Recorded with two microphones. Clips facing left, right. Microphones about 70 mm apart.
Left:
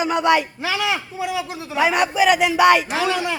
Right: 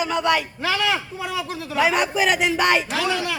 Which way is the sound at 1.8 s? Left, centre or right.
Centre.